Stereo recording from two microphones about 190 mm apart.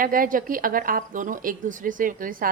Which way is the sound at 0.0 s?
50° right (ahead or behind).